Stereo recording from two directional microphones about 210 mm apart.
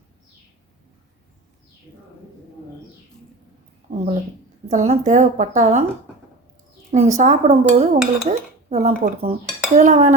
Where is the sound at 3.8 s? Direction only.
35° right (ahead or behind).